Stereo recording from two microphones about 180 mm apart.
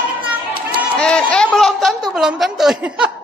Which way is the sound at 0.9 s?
5° left (ahead or behind).